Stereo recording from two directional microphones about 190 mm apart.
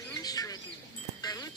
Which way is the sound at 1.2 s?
20° left (ahead or behind).